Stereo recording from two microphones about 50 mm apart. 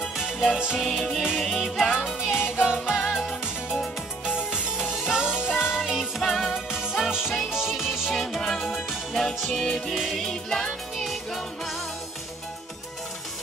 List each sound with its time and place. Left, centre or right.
0.2 s music: centre
3.3 s music: centre
4.5 s music: centre
5.8 s music: centre
8.1 s music: centre
11.1 s music: centre